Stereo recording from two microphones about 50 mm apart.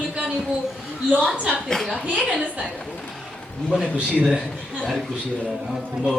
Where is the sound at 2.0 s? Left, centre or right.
Right.